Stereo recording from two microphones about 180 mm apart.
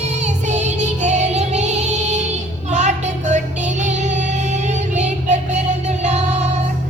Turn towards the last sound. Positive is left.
turn(degrees=-40)  # may be behind; listen again after turning